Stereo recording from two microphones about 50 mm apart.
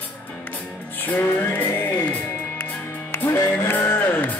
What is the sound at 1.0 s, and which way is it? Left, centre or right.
Music, left.